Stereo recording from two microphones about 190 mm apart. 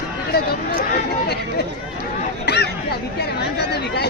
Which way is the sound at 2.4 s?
60° left (ahead or behind).